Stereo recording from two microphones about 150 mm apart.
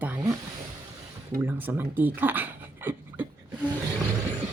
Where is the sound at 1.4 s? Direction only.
10° right (ahead or behind).